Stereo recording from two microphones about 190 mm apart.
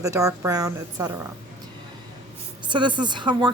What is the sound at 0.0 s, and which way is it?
A woman's voice, 15° right (ahead or behind).